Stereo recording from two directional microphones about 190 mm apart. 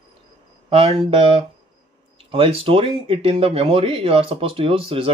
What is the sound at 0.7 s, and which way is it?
Speech, 30° right (ahead or behind).